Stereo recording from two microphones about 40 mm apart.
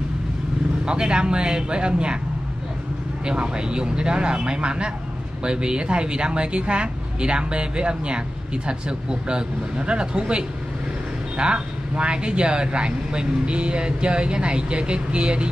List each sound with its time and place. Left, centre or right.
0.8 s speech: right
3.3 s speech: right